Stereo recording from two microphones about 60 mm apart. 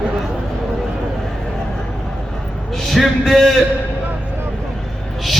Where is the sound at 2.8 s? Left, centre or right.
Centre.